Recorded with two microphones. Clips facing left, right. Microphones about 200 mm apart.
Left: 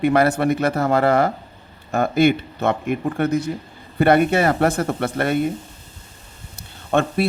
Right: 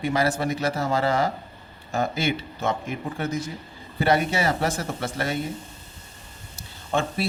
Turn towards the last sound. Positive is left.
turn(degrees=60)  # may be behind; listen again after turning